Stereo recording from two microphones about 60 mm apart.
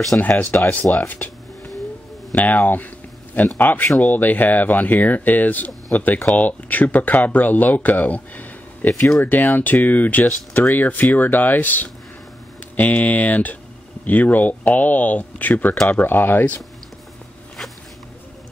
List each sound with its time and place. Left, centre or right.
0.2 s speech: left
2.3 s speech: left